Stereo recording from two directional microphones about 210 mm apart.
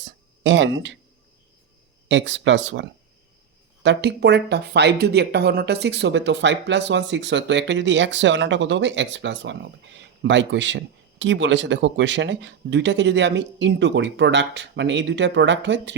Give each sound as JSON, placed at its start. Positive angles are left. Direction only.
{"t": 0.4, "sound": "speech", "side_deg": -60}
{"t": 2.0, "sound": "speech", "side_deg": -60}
{"t": 3.8, "sound": "speech", "side_deg": -55}